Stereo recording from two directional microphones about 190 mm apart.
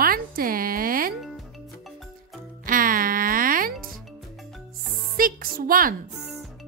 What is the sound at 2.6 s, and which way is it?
Music, 45° right (ahead or behind).